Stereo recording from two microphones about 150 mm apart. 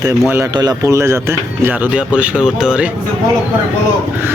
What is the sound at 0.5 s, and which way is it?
Speech, 25° right (ahead or behind).